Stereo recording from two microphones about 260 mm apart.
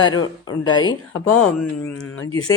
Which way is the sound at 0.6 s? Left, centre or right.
Centre.